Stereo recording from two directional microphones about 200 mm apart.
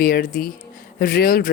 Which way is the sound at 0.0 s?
50° left (ahead or behind).